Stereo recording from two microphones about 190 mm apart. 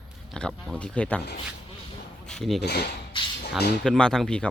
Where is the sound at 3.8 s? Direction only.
5° left (ahead or behind).